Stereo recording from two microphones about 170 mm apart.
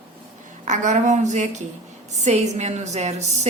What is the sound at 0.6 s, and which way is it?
A woman's voice, 45° right (ahead or behind).